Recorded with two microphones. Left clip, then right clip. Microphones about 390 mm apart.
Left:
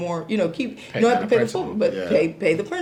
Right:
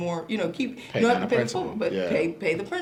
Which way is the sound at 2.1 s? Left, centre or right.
Left.